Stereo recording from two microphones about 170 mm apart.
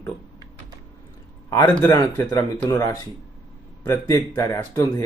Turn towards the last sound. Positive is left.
turn(degrees=20)  # may be behind; listen again after turning